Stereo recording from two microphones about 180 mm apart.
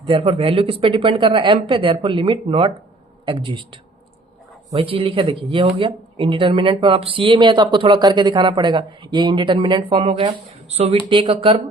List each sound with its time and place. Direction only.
0.0 s speech: 30° right (ahead or behind)